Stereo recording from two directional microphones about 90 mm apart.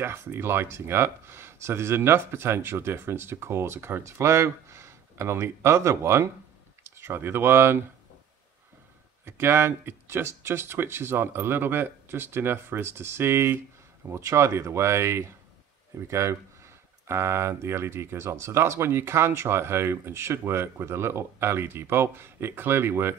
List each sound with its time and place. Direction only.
0.0 s speech: 30° right (ahead or behind)
9.2 s speech: 25° right (ahead or behind)